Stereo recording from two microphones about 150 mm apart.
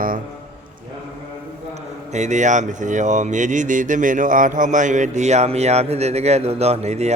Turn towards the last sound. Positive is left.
turn(degrees=-45)  # may be behind; listen again after turning